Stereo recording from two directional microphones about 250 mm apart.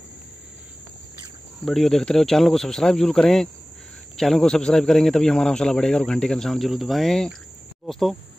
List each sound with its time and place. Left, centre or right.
1.6 s a man's voice: centre